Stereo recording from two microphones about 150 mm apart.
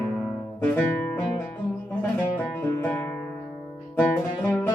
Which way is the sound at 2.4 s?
15° left (ahead or behind).